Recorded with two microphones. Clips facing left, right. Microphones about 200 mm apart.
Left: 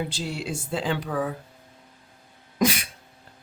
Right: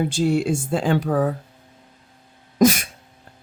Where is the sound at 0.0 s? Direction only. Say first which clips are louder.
Right 11 dB; 50° right (ahead or behind).